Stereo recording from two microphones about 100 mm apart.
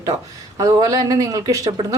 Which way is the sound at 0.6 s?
35° right (ahead or behind).